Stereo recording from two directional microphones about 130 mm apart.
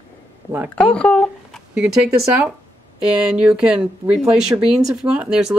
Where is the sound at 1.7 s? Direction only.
10° right (ahead or behind).